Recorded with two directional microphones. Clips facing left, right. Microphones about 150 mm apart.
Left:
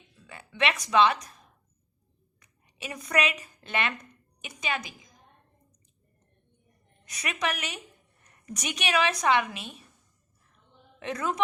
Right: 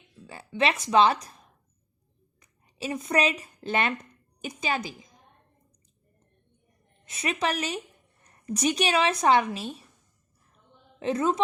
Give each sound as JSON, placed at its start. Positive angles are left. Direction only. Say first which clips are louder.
{"t": 0.3, "sound": "a woman's voice", "louder": "right 3 dB", "side_deg": -30}
{"t": 2.7, "sound": "a woman's voice", "louder": "right 3 dB", "side_deg": -30}
{"t": 7.0, "sound": "a woman's voice", "louder": "right 3 dB", "side_deg": -25}
{"t": 11.0, "sound": "a man's voice", "louder": "right 6 dB", "side_deg": -30}